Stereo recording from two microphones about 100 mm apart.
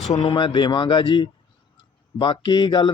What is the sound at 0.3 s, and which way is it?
Speech, 55° left (ahead or behind).